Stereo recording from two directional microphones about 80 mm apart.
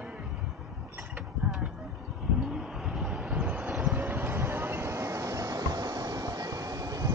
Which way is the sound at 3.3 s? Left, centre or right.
Centre.